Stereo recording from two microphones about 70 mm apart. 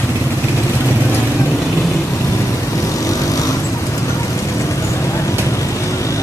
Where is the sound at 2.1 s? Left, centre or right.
Left.